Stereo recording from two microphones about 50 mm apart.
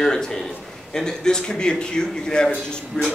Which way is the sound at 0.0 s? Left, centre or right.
Centre.